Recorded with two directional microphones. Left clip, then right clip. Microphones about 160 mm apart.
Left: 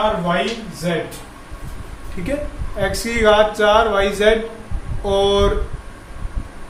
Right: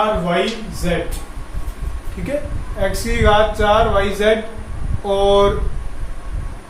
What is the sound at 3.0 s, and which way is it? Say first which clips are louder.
A man's voice: left 1 dB; 25° left (ahead or behind).